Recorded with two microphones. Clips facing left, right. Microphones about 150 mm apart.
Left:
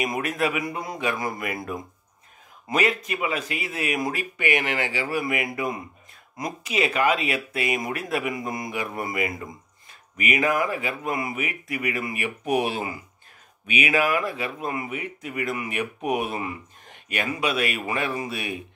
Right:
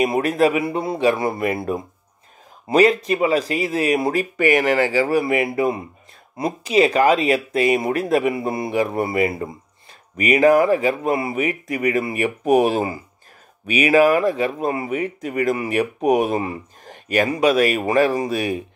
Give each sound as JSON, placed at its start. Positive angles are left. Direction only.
{"t": 0.0, "sound": "speech", "side_deg": -30}